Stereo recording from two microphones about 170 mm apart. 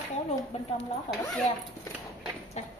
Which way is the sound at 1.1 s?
35° left (ahead or behind).